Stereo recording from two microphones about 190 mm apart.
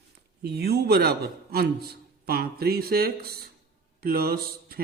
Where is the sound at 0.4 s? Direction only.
55° right (ahead or behind).